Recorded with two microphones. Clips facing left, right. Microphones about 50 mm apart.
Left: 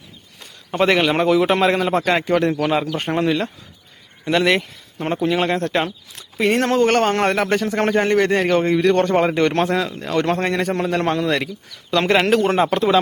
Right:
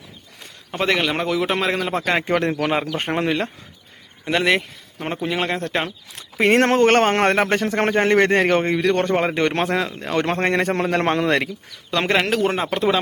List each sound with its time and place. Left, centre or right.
0.7 s a man's voice: centre
2.2 s speech: right
4.3 s a man's voice: centre
6.4 s speech: right
9.1 s speech: centre
9.4 s speech: centre
10.5 s speech: right
11.9 s speech: centre
12.1 s a man's voice: centre